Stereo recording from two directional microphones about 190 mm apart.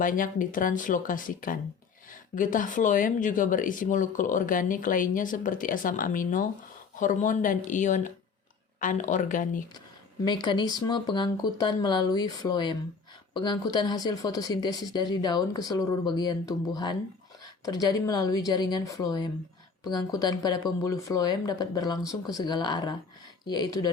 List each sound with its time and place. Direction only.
0.0 s speech: 45° left (ahead or behind)
10.2 s speech: 25° left (ahead or behind)